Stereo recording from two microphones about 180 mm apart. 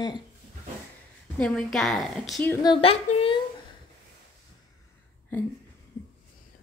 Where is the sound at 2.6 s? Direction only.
30° left (ahead or behind).